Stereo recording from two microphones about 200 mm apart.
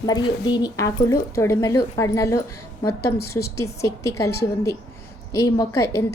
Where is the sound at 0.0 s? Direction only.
20° left (ahead or behind).